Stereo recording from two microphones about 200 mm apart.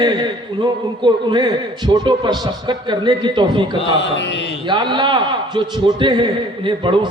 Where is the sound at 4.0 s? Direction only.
60° left (ahead or behind).